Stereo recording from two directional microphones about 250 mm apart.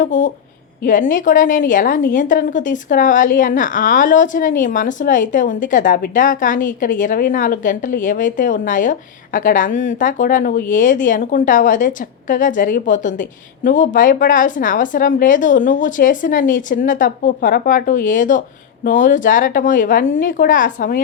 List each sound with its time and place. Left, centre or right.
0.0 s a woman's voice: left